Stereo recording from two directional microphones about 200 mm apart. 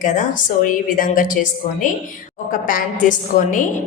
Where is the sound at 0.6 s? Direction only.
45° left (ahead or behind).